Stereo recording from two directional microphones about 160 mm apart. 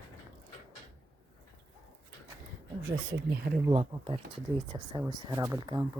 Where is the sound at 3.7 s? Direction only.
35° right (ahead or behind).